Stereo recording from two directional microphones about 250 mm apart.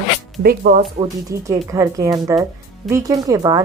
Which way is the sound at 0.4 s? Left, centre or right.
Right.